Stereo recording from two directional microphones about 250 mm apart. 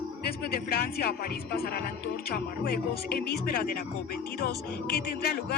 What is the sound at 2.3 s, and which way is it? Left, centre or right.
A man's voice, left.